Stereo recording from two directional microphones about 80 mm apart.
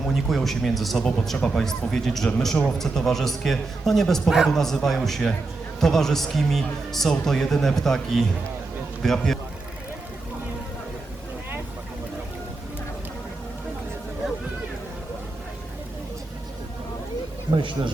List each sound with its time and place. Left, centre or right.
0.0 s a man's voice: centre
17.6 s a man's voice: right